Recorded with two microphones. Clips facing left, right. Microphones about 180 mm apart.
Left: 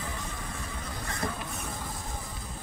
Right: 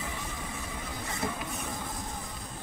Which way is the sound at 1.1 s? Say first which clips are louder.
Even; 5° right (ahead or behind).